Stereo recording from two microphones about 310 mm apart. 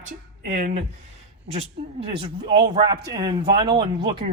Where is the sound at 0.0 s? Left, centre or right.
Right.